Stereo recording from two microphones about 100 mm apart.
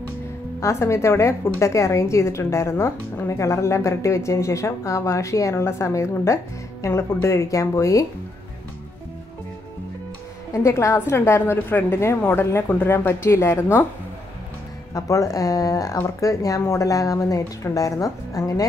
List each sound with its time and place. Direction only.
0.6 s a woman's voice: 30° left (ahead or behind)
10.5 s a woman's voice: 30° left (ahead or behind)
15.0 s a woman's voice: 35° left (ahead or behind)